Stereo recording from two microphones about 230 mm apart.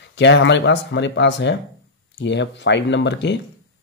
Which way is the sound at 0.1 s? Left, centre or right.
Left.